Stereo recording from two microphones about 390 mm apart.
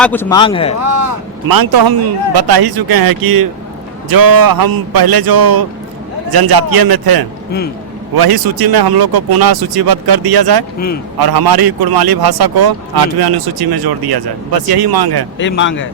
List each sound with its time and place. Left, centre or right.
0.0 s a man's voice: centre
0.8 s a man's voice: right
15.4 s speech: left